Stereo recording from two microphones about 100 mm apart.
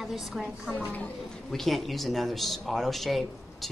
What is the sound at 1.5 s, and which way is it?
Speech, centre (ahead or behind).